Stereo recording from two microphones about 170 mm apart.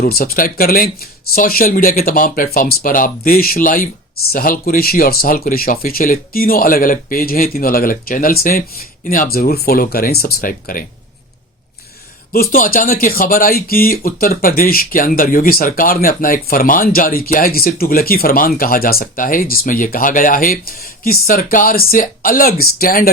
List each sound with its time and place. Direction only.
0.0 s speech: 65° left (ahead or behind)
12.3 s speech: 55° left (ahead or behind)